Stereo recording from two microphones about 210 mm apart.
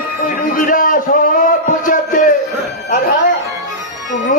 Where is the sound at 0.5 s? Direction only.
40° left (ahead or behind).